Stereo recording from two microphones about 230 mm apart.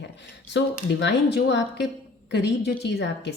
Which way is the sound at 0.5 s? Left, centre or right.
Left.